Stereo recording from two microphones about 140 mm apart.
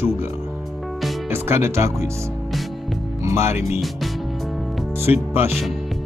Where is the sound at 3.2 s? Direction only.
20° right (ahead or behind).